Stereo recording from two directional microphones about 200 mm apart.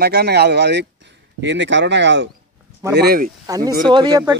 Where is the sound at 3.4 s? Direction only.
20° right (ahead or behind).